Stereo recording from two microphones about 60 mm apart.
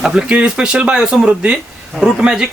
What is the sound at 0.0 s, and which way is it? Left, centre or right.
Speech, centre.